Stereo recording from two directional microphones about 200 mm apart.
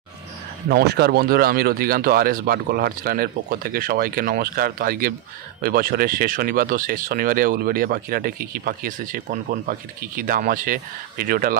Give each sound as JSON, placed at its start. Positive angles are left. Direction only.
{"t": 0.7, "sound": "speech", "side_deg": -50}